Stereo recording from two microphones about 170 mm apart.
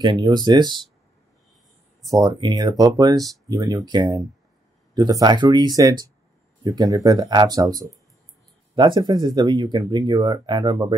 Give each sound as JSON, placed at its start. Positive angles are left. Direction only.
{"t": 0.0, "sound": "speech", "side_deg": -25}
{"t": 2.0, "sound": "speech", "side_deg": -20}